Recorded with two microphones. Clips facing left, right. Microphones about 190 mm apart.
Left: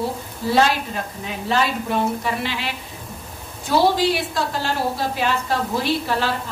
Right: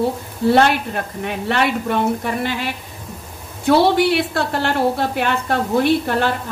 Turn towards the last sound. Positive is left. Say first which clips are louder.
# right 5 dB
turn(degrees=-55)  # may be behind; listen again after turning